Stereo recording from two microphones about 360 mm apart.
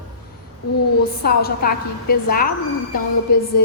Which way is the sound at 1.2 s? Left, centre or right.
Left.